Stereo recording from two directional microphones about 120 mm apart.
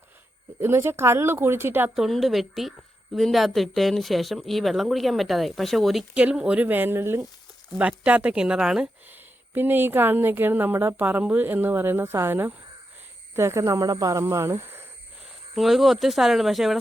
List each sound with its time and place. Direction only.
0.6 s speech: 20° right (ahead or behind)
2.0 s a woman's voice: centre (ahead or behind)
9.0 s a woman's voice: 15° right (ahead or behind)
15.5 s a woman's voice: centre (ahead or behind)